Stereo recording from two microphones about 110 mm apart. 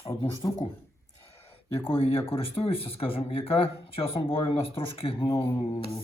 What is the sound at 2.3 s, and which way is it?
Speech, 60° left (ahead or behind).